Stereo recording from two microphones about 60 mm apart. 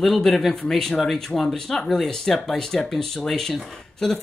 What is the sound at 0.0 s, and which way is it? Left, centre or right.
Speech, centre.